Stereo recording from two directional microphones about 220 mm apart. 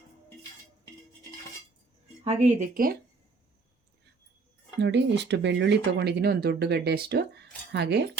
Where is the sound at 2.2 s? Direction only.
35° right (ahead or behind).